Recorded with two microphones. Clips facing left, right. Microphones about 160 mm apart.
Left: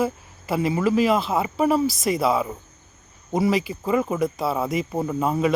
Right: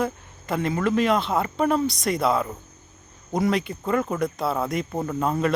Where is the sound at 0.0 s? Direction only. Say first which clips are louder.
Left 2 dB; 5° left (ahead or behind).